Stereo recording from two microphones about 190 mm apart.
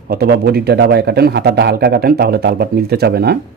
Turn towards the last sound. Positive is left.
turn(degrees=-55)  # may be behind; listen again after turning